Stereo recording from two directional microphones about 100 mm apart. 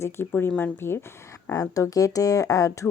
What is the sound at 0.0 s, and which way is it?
Speech, 25° left (ahead or behind).